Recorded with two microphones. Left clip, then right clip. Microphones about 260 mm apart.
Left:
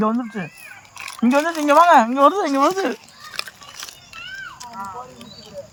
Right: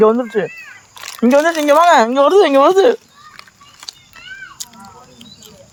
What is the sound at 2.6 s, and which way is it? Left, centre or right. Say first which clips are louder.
Speech: right 9 dB; right.